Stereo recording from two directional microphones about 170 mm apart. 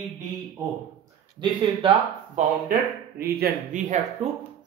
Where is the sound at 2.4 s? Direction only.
45° right (ahead or behind).